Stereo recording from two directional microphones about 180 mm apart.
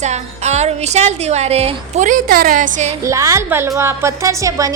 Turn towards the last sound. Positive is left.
turn(degrees=-20)  # may be behind; listen again after turning